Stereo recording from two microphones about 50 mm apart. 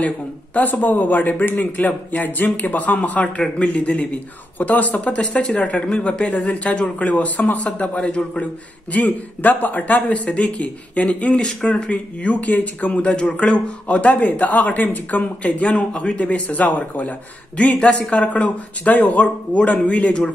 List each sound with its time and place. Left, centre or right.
0.6 s a man's voice: left; by 8.5 s centre
8.9 s speech: left
11.3 s speech: centre
11.9 s speech: left
17.6 s speech: left